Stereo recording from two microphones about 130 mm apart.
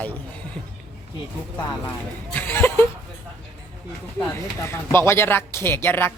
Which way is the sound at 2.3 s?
15° left (ahead or behind).